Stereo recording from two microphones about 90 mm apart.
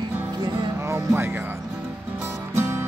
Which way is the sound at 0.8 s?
30° right (ahead or behind).